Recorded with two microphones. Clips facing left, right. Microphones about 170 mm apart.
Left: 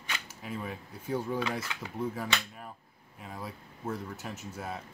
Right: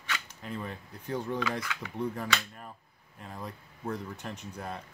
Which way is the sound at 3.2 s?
5° left (ahead or behind).